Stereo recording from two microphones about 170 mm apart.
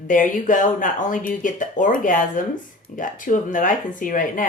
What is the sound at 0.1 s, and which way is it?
Speech, 50° left (ahead or behind).